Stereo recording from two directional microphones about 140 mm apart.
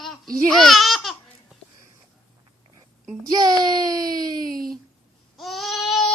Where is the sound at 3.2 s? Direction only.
30° right (ahead or behind).